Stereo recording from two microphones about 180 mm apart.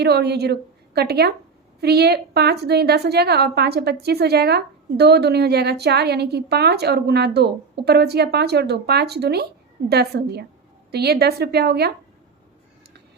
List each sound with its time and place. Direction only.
0.0 s a woman's voice: 65° right (ahead or behind)